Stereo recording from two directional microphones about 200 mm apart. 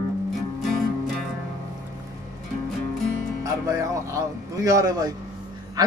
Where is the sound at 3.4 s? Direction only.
15° right (ahead or behind).